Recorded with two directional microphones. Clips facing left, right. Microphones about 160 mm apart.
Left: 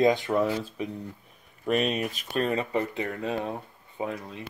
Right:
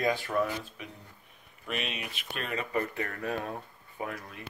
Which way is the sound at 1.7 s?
40° left (ahead or behind).